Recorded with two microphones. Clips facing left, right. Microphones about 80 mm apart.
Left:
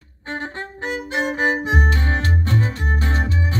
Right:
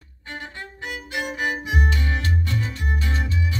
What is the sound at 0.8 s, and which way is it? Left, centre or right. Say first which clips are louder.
Violin: left 6 dB; left.